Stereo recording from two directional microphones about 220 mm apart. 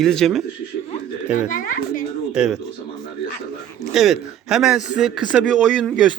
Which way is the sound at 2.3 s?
5° right (ahead or behind).